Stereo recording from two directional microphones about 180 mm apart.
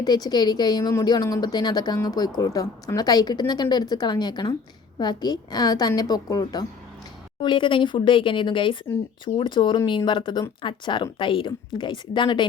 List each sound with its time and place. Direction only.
0.0 s speech: 20° left (ahead or behind)